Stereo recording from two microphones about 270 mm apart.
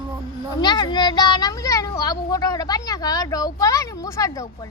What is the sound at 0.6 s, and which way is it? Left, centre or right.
A child's voice, centre.